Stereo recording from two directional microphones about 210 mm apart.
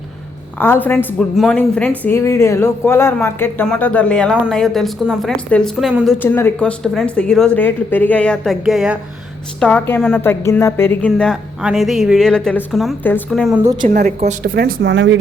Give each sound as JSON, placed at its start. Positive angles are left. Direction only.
{"t": 0.6, "sound": "a woman's voice", "side_deg": 10}
{"t": 6.2, "sound": "a woman's voice", "side_deg": 10}
{"t": 13.8, "sound": "a woman's voice", "side_deg": -35}